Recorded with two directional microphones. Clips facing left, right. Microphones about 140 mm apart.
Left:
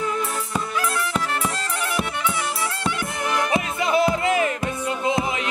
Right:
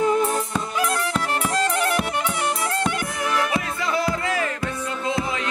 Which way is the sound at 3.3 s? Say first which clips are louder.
Left 3 dB; 20° left (ahead or behind).